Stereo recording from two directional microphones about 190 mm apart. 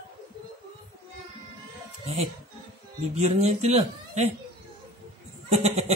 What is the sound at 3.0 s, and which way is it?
Speech, 35° right (ahead or behind).